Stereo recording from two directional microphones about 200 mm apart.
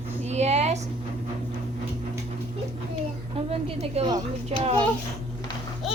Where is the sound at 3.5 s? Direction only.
30° right (ahead or behind).